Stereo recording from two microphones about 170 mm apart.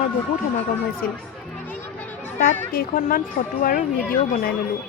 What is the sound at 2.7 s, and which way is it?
A woman's voice, 55° left (ahead or behind).